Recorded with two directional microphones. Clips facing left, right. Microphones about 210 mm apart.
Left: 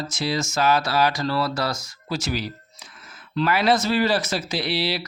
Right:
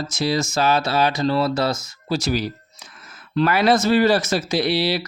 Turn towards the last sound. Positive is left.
turn(degrees=-45)  # may be behind; listen again after turning